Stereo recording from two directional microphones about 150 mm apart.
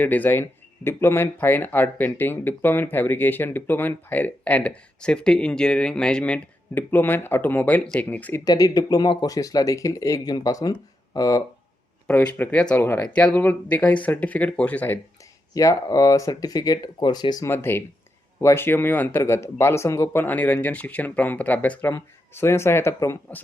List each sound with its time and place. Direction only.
0.0 s speech: 10° left (ahead or behind)
8.4 s speech: 25° left (ahead or behind)
12.0 s speech: 10° left (ahead or behind)
15.5 s speech: 25° left (ahead or behind)